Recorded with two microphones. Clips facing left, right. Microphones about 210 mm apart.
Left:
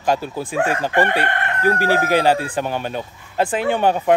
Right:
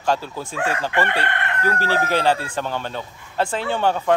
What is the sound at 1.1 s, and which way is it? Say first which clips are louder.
Chicken: left 3 dB; 35° left (ahead or behind).